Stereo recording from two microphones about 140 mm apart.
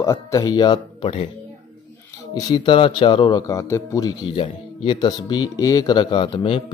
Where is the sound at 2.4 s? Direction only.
30° left (ahead or behind).